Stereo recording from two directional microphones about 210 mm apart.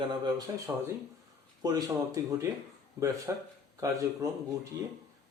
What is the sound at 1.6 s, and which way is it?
Speech, 20° right (ahead or behind).